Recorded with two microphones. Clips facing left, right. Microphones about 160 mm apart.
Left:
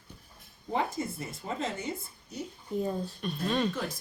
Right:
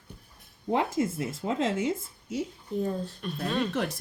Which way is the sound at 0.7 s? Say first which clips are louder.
Right 5 dB; 90° right.